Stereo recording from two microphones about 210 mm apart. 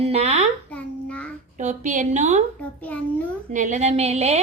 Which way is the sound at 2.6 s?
5° left (ahead or behind).